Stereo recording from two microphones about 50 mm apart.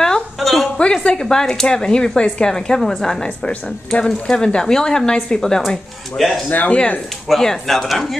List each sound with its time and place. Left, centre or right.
0.4 s a sound: centre
0.7 s speech: centre
5.7 s speech: centre
6.7 s speech: left
7.2 s speech: centre